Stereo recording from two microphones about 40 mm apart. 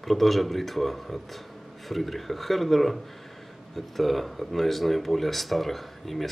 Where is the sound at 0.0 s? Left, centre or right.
Centre.